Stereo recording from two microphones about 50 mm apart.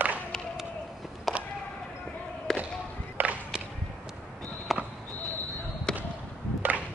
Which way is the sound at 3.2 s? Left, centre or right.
Right.